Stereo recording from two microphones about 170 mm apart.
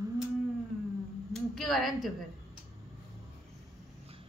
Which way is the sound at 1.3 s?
Centre (ahead or behind).